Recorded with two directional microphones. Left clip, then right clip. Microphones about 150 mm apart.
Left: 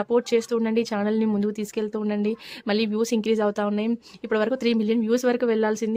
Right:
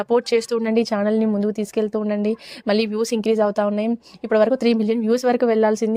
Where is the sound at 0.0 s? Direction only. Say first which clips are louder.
Right 3 dB; 35° right (ahead or behind).